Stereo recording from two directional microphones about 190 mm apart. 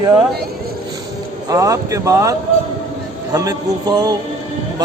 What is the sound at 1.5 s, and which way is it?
A man's voice, 15° right (ahead or behind).